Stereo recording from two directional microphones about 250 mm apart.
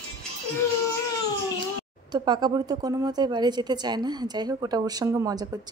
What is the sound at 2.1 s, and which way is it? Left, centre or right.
A woman's voice, centre.